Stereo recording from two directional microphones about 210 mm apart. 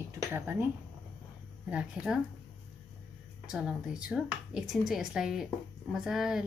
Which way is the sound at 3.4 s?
5° right (ahead or behind).